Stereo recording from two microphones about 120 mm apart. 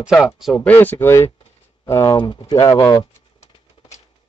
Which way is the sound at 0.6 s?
15° left (ahead or behind).